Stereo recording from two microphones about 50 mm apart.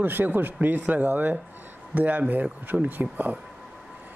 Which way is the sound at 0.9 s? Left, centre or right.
Right.